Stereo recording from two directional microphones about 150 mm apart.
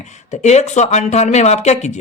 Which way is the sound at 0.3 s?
50° left (ahead or behind).